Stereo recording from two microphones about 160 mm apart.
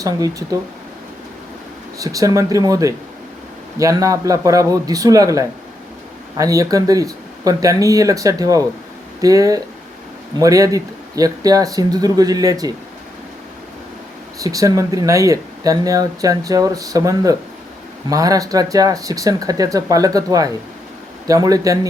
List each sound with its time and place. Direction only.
0.0 s speech: 20° right (ahead or behind)
2.0 s speech: 20° right (ahead or behind)
14.4 s speech: 20° right (ahead or behind)